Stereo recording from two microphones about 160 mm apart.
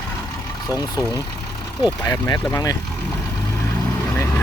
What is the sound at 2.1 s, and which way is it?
Speech, 20° left (ahead or behind).